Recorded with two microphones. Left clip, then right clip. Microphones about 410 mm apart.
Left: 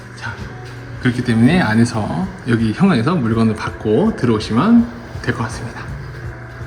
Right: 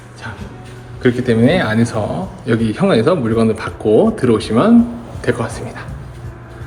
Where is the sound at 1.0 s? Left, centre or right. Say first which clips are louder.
Right 4 dB; centre.